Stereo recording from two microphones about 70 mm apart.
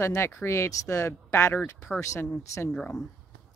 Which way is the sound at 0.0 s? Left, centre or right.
Left.